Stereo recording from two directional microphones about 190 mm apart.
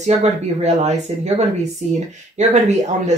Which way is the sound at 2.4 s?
40° right (ahead or behind).